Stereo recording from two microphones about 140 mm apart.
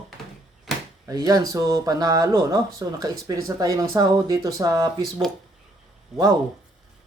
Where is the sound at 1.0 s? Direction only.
25° right (ahead or behind).